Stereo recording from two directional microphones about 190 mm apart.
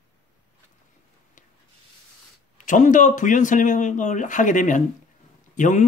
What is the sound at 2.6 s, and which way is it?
Speech, 40° left (ahead or behind).